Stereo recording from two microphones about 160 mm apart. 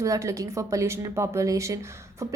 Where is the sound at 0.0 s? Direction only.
20° right (ahead or behind).